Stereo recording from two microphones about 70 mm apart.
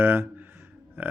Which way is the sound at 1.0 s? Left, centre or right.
Right.